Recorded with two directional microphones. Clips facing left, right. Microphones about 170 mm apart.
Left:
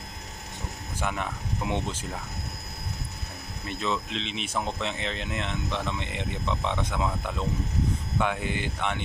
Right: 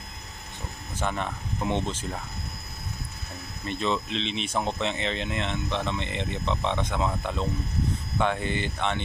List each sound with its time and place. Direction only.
0.9 s speech: 10° left (ahead or behind)
3.6 s speech: 5° left (ahead or behind)